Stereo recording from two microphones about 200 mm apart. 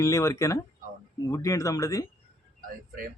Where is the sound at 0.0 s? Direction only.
15° left (ahead or behind).